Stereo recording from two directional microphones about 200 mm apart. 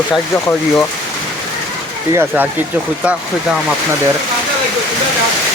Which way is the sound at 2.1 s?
10° right (ahead or behind).